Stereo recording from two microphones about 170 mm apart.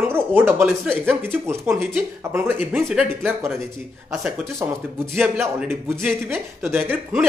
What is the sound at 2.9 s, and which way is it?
Speech, centre (ahead or behind).